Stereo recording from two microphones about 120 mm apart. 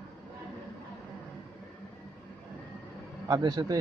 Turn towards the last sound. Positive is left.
turn(degrees=-30)  # may be behind; listen again after turning